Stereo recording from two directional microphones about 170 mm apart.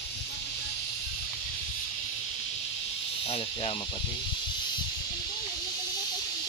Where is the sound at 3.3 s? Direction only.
35° left (ahead or behind).